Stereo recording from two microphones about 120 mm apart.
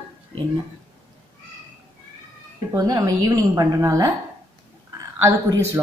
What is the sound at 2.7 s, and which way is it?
Speech, 30° right (ahead or behind).